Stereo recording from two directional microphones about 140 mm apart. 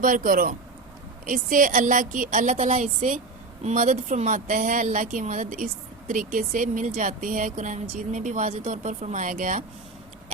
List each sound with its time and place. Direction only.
0.0 s speech: 75° right (ahead or behind)